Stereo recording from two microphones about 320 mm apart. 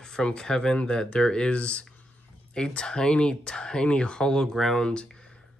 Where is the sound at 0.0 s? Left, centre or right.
Centre.